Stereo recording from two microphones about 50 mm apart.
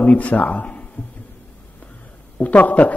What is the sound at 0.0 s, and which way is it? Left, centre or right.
Speech, left.